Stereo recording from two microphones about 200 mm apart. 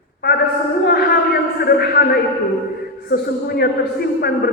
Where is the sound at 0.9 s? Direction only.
50° left (ahead or behind).